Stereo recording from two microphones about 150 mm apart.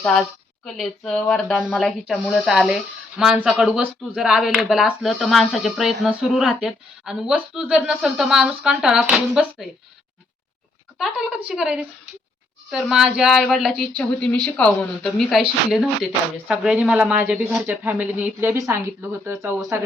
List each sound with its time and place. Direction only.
0.6 s speech: centre (ahead or behind)
10.9 s speech: centre (ahead or behind)
15.3 s speech: 5° right (ahead or behind)